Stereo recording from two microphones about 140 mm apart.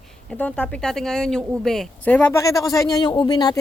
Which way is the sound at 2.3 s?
25° left (ahead or behind).